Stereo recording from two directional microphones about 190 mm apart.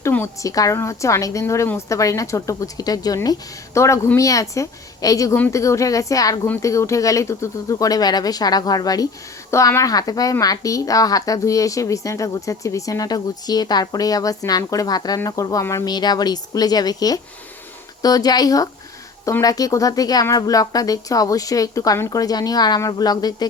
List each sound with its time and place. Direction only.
0.0 s a woman's voice: 15° left (ahead or behind)